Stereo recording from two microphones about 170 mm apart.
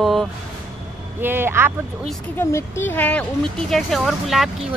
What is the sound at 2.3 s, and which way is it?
Speech, 15° left (ahead or behind).